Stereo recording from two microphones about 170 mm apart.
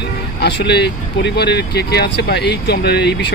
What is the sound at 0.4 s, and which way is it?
Speech, 85° left.